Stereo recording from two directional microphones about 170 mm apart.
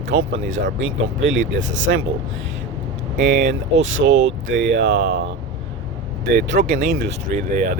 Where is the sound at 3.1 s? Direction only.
85° right.